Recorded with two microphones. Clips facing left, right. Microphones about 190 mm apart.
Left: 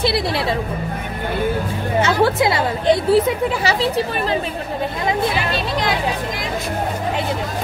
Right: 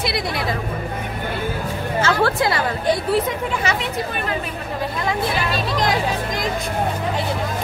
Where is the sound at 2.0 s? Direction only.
20° left (ahead or behind).